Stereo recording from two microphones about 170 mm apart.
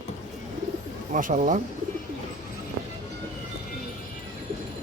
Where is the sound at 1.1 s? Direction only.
45° right (ahead or behind).